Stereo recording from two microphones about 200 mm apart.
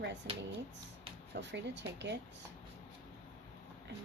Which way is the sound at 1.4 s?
60° right (ahead or behind).